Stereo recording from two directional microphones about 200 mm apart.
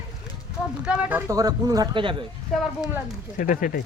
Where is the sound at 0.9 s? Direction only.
5° right (ahead or behind); by 2.2 s 25° right (ahead or behind).